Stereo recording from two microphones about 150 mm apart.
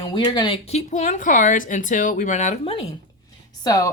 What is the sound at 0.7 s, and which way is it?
Speech, 50° left (ahead or behind).